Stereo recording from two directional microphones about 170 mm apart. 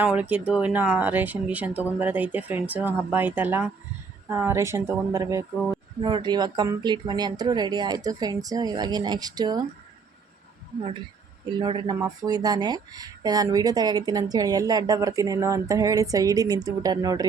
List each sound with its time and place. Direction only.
0.0 s speech: 10° right (ahead or behind)
11.5 s speech: 25° right (ahead or behind)